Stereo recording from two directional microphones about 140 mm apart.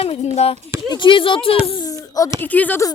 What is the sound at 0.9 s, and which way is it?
Speech, 35° left (ahead or behind).